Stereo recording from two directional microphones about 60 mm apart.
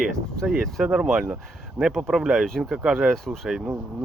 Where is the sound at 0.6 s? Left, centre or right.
Centre.